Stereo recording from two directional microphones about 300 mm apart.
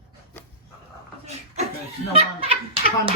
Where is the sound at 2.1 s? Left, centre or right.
Centre.